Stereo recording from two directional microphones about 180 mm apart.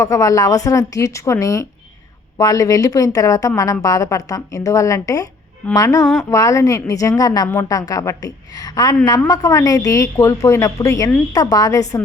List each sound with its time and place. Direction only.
0.0 s a woman's voice: 20° left (ahead or behind)